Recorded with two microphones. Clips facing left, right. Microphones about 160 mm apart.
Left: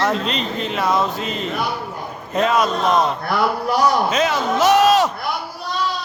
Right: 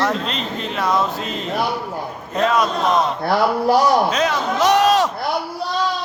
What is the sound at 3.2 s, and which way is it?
Speech, 30° right (ahead or behind).